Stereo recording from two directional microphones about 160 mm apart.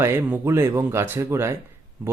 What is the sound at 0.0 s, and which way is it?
Speech, 15° right (ahead or behind).